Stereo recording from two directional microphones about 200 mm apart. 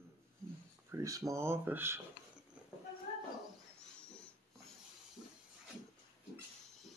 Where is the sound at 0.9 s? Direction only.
15° right (ahead or behind).